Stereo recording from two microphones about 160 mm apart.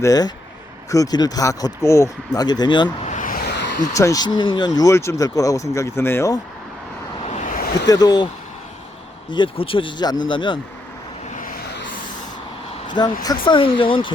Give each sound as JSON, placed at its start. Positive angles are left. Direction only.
{"t": 0.0, "sound": "speech", "side_deg": 25}
{"t": 3.0, "sound": "a sound", "side_deg": 50}
{"t": 3.9, "sound": "speech", "side_deg": 20}
{"t": 7.3, "sound": "a sound", "side_deg": 50}
{"t": 7.9, "sound": "speech", "side_deg": 25}
{"t": 9.3, "sound": "speech", "side_deg": 30}
{"t": 11.3, "sound": "vehicle", "side_deg": 55}
{"t": 13.2, "sound": "speech", "side_deg": 30}